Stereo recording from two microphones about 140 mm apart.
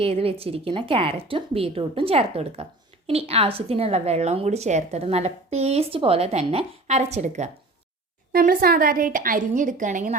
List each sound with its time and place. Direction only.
0.0 s a woman's voice: 45° right (ahead or behind)
8.3 s a woman's voice: 90° right; by 10.2 s 65° right (ahead or behind)